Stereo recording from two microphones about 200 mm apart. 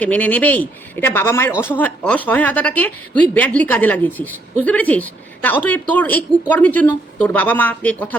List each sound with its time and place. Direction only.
0.0 s a woman's voice: 5° left (ahead or behind)